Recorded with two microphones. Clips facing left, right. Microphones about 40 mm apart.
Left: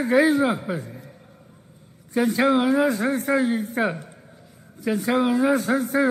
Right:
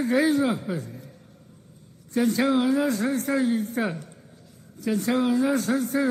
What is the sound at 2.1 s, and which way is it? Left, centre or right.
A man's voice, centre.